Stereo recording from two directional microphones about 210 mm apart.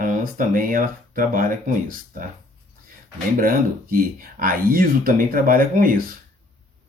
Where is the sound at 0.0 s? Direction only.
40° right (ahead or behind).